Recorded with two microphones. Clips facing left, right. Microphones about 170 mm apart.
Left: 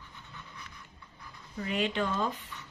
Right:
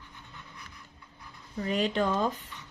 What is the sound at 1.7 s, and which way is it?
Speech, 40° right (ahead or behind).